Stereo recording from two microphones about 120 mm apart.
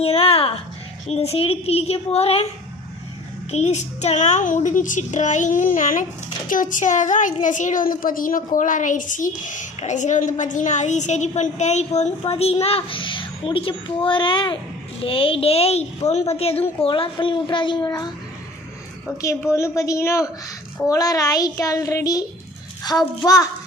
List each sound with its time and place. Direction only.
0.0 s a woman's voice: 55° left (ahead or behind)
3.5 s a woman's voice: 65° left (ahead or behind); by 18.1 s 35° left (ahead or behind)
19.5 s a child's voice: 25° left (ahead or behind)